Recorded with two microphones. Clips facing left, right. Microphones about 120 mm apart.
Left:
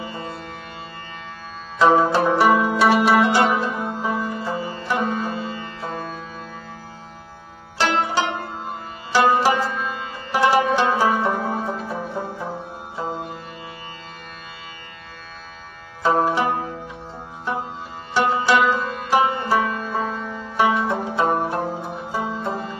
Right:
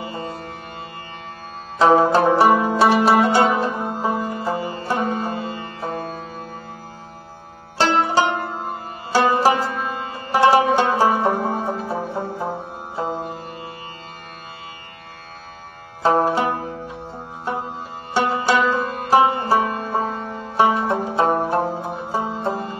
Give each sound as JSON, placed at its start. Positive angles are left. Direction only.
{"t": 0.0, "sound": "music", "side_deg": -45}
{"t": 1.8, "sound": "music", "side_deg": -45}
{"t": 7.8, "sound": "music", "side_deg": -40}
{"t": 16.1, "sound": "music", "side_deg": -40}
{"t": 18.1, "sound": "music", "side_deg": -45}
{"t": 20.9, "sound": "banjo", "side_deg": -40}